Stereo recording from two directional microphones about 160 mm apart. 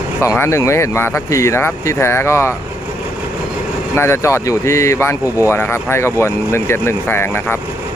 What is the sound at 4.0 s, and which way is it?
Speech, 15° left (ahead or behind).